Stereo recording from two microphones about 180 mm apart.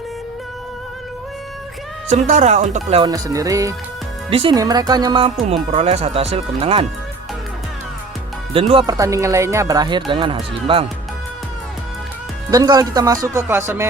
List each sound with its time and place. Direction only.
2.0 s speech: 40° right (ahead or behind)
3.0 s speech: 20° right (ahead or behind)
4.3 s speech: 30° right (ahead or behind)
4.5 s speech: 20° right (ahead or behind)
8.5 s speech: 30° right (ahead or behind)
12.5 s speech: 20° right (ahead or behind)